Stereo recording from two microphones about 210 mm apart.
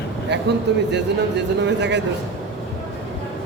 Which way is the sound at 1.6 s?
55° right (ahead or behind).